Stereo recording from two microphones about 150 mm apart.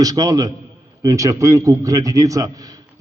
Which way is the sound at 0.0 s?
25° right (ahead or behind).